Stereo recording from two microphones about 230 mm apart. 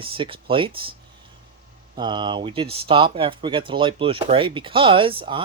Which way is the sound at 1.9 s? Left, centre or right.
Centre.